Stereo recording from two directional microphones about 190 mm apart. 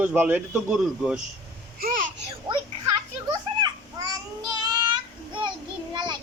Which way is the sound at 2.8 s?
20° right (ahead or behind).